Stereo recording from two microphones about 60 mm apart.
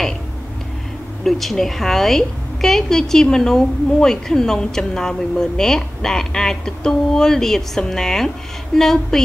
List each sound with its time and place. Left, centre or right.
1.2 s a woman's voice: centre